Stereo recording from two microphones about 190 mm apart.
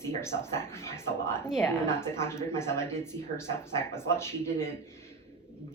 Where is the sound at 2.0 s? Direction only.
15° left (ahead or behind).